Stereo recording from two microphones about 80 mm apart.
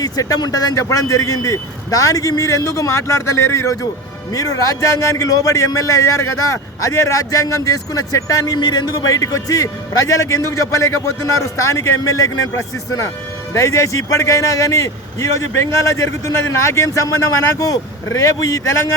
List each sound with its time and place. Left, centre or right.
0.0 s a man's voice: left
8.5 s a man's voice: left